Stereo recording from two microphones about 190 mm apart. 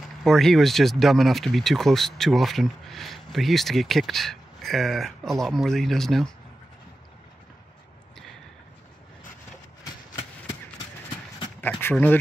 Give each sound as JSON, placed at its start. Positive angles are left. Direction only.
{"t": 0.2, "sound": "speech", "side_deg": 0}
{"t": 11.6, "sound": "speech", "side_deg": 10}